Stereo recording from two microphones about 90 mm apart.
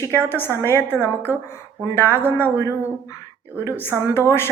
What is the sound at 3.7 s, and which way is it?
Speech, 25° left (ahead or behind).